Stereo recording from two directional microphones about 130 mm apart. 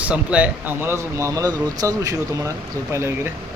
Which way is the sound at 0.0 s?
10° right (ahead or behind).